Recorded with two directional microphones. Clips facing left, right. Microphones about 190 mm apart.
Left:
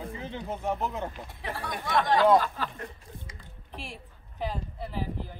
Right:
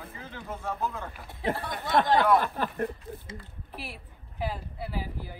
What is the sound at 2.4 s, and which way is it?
Speech, 55° right (ahead or behind).